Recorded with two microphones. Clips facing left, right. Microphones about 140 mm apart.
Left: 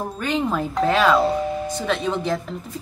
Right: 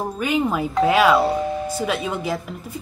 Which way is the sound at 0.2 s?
10° right (ahead or behind).